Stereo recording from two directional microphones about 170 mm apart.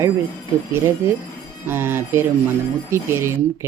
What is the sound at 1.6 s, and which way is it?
Speech, 15° right (ahead or behind).